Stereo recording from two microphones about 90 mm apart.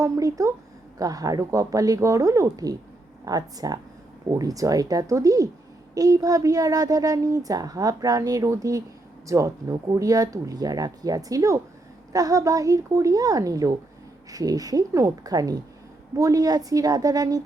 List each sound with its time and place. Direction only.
0.0 s a woman's voice: 40° right (ahead or behind)